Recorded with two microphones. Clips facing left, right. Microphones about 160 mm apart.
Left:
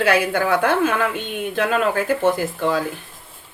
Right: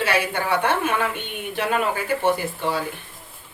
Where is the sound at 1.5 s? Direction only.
90° left.